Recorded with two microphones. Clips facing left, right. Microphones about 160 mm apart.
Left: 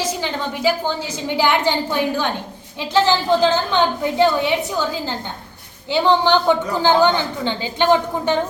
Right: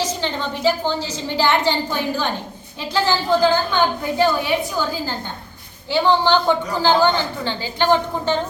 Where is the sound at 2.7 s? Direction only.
20° left (ahead or behind).